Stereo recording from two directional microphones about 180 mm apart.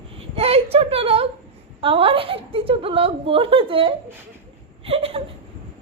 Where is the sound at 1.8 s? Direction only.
30° right (ahead or behind).